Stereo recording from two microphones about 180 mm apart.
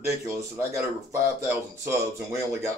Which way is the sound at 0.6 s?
15° right (ahead or behind).